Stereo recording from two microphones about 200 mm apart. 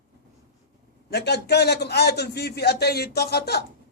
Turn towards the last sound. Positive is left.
turn(degrees=55)  # may be behind; listen again after turning